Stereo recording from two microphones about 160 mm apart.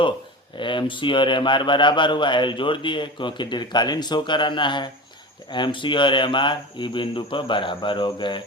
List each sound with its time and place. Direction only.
0.5 s a man's voice: 30° left (ahead or behind)